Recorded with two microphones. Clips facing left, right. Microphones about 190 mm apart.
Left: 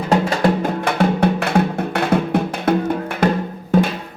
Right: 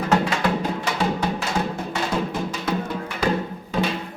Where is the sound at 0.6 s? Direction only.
55° left (ahead or behind).